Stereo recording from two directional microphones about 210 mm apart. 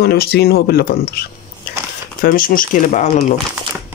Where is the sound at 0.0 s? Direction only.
50° left (ahead or behind).